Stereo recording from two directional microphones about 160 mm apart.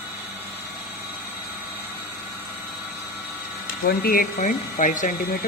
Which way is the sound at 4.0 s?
65° left (ahead or behind).